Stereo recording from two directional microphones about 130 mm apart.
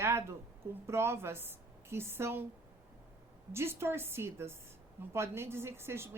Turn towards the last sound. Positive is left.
turn(degrees=-20)  # may be behind; listen again after turning